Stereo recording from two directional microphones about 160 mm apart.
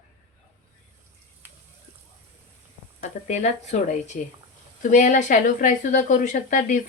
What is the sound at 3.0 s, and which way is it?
A woman's voice, 45° left (ahead or behind).